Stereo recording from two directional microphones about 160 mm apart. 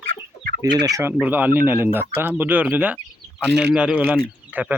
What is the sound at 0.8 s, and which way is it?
Speech, 15° right (ahead or behind).